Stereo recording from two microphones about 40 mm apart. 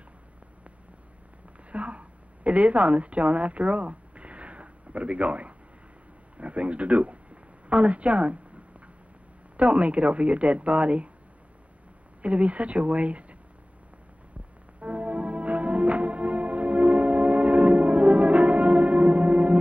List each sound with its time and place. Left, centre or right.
1.7 s a sound: right
6.3 s speech: right
9.6 s a woman's voice: right
12.2 s a woman's voice: right
14.8 s music: right